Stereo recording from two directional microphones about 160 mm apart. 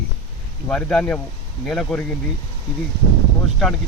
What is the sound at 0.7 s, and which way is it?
Speech, 5° left (ahead or behind).